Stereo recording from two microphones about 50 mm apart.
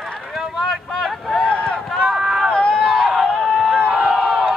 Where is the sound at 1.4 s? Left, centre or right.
Left.